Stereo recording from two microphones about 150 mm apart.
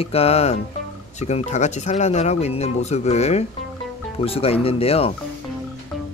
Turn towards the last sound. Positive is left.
turn(degrees=40)  # may be behind; listen again after turning